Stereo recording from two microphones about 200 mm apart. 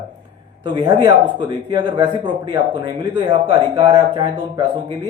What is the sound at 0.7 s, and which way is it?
Speech, 25° right (ahead or behind).